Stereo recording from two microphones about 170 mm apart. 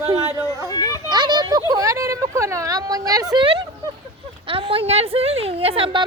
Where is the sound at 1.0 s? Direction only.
25° right (ahead or behind).